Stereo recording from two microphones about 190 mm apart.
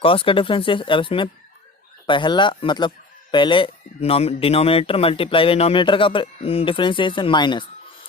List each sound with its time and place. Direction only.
0.0 s speech: 30° left (ahead or behind)